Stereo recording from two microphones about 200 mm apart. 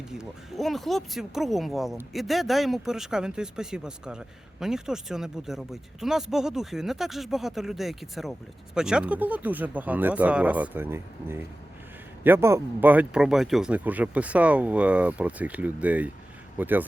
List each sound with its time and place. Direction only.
0.1 s speech: centre (ahead or behind)